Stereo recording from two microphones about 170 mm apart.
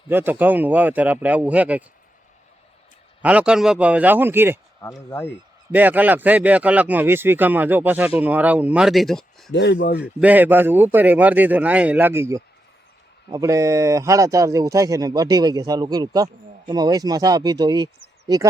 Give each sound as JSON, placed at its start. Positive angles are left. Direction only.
{"t": 0.1, "sound": "speech", "side_deg": -10}
{"t": 3.2, "sound": "speech", "side_deg": -5}
{"t": 4.8, "sound": "speech", "side_deg": 15}
{"t": 5.7, "sound": "speech", "side_deg": -10}
{"t": 9.5, "sound": "speech", "side_deg": 90}
{"t": 9.7, "sound": "a man's voice", "side_deg": 65}
{"t": 10.0, "sound": "speech", "side_deg": -10}